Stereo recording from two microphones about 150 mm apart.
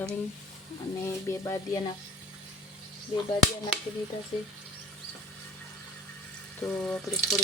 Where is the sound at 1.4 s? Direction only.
20° left (ahead or behind).